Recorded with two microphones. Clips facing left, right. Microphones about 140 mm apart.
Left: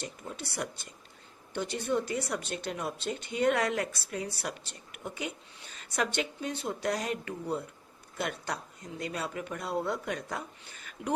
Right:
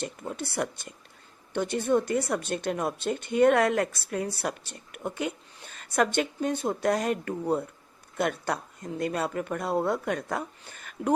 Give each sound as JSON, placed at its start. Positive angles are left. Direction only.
{"t": 0.0, "sound": "a woman's voice", "side_deg": -55}